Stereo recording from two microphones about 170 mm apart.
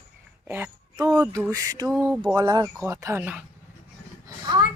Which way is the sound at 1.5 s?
20° right (ahead or behind).